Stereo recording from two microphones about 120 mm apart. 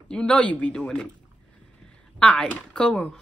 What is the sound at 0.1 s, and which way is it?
Speech, 10° left (ahead or behind).